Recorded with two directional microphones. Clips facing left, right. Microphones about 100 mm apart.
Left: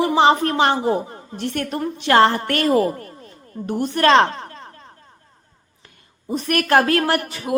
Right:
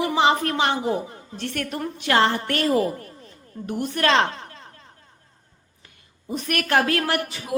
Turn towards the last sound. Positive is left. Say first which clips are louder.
# left 4 dB
turn(degrees=50)  # may be behind; listen again after turning